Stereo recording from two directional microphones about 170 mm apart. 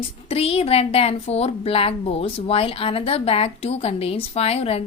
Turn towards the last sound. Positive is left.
turn(degrees=35)  # may be behind; listen again after turning